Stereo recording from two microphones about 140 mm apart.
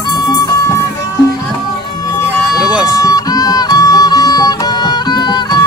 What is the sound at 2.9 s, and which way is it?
Music, 25° left (ahead or behind).